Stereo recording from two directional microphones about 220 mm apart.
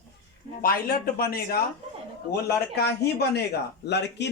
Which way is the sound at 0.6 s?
40° left (ahead or behind).